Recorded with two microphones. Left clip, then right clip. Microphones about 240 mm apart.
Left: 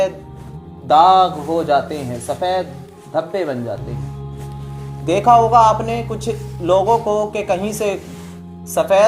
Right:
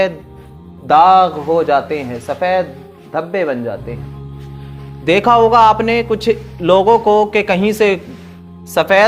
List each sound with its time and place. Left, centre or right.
0.9 s speech: right
5.3 s speech: right